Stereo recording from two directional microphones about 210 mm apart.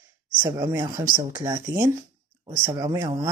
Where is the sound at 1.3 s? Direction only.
15° right (ahead or behind).